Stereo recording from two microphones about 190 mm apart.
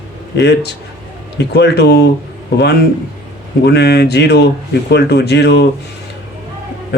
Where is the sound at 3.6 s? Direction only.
60° left (ahead or behind).